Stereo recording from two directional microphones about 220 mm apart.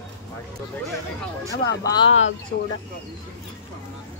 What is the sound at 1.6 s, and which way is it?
Speech, 50° left (ahead or behind).